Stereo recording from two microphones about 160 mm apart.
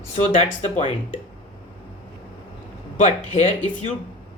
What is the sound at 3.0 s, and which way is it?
Speech, 45° left (ahead or behind).